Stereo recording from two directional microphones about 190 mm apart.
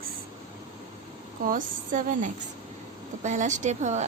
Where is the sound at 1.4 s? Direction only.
45° right (ahead or behind).